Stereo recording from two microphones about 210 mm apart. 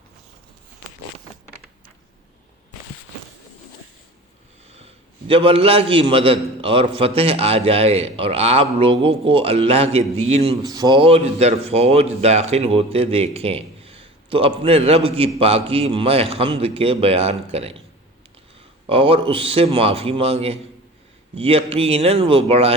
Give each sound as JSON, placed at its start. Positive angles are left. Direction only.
{"t": 5.3, "sound": "a man's voice", "side_deg": -25}
{"t": 10.6, "sound": "a man's voice", "side_deg": -20}
{"t": 18.9, "sound": "a man's voice", "side_deg": -25}